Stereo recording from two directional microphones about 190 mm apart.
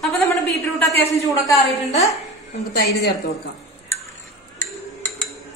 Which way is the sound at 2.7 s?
55° left (ahead or behind).